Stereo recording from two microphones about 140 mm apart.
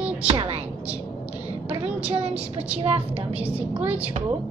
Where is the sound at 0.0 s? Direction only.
10° right (ahead or behind).